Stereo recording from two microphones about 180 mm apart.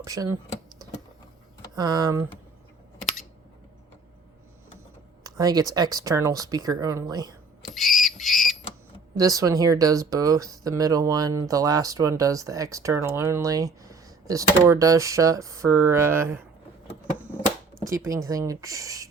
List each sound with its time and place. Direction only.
0.0 s speech: 20° right (ahead or behind)
1.7 s speech: 20° right (ahead or behind)
5.2 s speech: 20° right (ahead or behind)
7.7 s squawk: centre (ahead or behind)
9.1 s speech: 20° right (ahead or behind)
17.8 s speech: 15° right (ahead or behind)